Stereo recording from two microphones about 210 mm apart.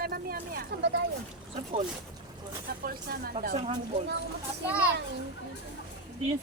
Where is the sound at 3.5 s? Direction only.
30° right (ahead or behind).